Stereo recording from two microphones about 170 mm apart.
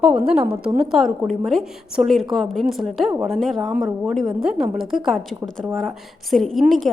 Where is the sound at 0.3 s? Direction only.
5° right (ahead or behind).